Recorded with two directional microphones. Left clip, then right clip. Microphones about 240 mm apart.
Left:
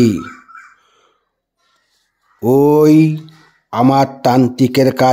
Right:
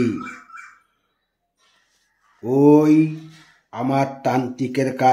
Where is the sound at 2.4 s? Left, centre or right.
Left.